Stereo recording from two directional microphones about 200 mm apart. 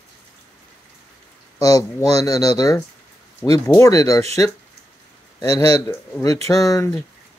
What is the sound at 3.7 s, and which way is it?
Speech, 15° left (ahead or behind).